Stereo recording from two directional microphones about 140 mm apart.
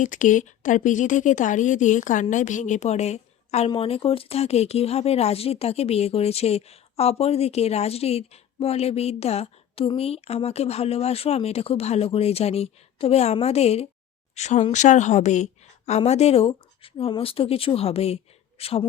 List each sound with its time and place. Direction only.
0.0 s a woman's voice: 65° left (ahead or behind); by 18.9 s 45° left (ahead or behind)